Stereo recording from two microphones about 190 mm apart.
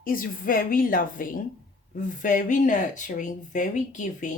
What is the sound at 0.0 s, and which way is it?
Speech, 45° left (ahead or behind).